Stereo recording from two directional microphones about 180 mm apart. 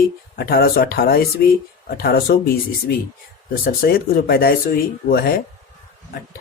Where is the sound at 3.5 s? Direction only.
60° left (ahead or behind).